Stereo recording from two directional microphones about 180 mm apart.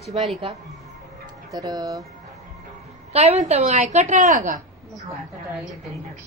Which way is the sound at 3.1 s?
35° right (ahead or behind).